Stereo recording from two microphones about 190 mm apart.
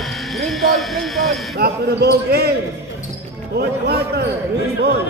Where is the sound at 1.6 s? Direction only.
60° right (ahead or behind).